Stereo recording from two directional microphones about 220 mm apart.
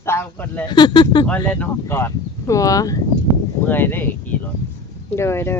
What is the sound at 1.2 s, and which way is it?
Speech, 5° left (ahead or behind).